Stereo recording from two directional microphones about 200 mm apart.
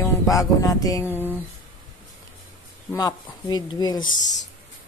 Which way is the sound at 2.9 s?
20° left (ahead or behind).